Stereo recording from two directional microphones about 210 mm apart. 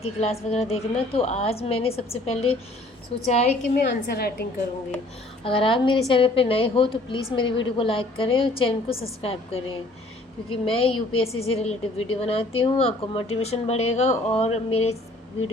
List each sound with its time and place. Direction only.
0.0 s a woman's voice: 30° left (ahead or behind)
3.8 s a woman's voice: 50° left (ahead or behind)
5.5 s a woman's voice: 25° left (ahead or behind)